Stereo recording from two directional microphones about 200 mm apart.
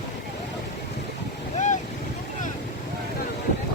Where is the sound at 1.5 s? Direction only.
35° left (ahead or behind).